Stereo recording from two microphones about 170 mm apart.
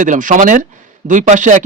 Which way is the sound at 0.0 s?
50° right (ahead or behind).